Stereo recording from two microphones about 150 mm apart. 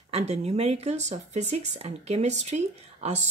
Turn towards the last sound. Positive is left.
turn(degrees=-45)  # may be behind; listen again after turning